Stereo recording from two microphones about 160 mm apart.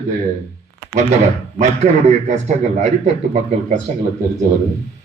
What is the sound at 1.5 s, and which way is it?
A man's voice, 45° right (ahead or behind).